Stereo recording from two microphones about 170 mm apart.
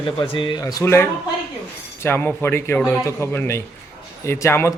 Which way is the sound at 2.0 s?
15° left (ahead or behind).